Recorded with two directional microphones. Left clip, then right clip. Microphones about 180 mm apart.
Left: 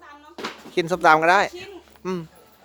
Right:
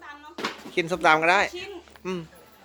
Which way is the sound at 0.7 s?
25° left (ahead or behind).